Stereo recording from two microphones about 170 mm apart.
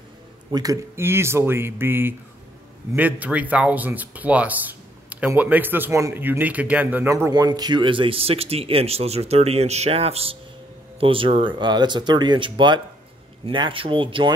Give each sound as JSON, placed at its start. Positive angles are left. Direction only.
{"t": 0.5, "sound": "speech", "side_deg": -20}
{"t": 7.2, "sound": "speech", "side_deg": -25}